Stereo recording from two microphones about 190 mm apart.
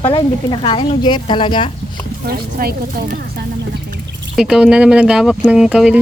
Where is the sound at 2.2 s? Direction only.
55° right (ahead or behind).